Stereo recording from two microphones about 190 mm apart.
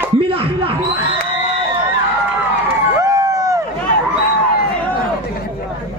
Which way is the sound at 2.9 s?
15° right (ahead or behind).